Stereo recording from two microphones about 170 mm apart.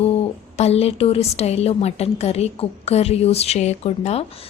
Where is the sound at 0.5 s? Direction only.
40° left (ahead or behind).